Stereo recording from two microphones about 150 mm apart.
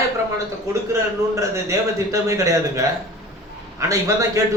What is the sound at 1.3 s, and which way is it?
A man's voice, 20° right (ahead or behind).